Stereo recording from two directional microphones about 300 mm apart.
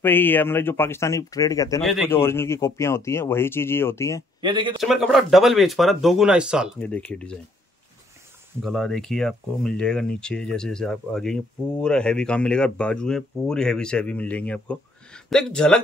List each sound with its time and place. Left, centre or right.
0.0 s speech: centre
4.4 s speech: centre
4.7 s speech: centre
8.6 s speech: centre